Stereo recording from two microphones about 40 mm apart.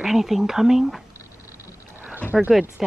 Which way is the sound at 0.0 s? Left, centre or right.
Centre.